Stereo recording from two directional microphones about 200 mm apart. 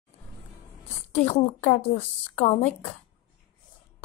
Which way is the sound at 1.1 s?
30° left (ahead or behind).